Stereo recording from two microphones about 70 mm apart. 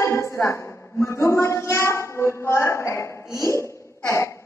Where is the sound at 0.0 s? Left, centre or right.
Left.